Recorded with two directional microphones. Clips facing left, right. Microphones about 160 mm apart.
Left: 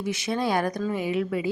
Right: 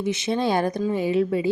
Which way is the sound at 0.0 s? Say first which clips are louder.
Right 3 dB; 25° right (ahead or behind).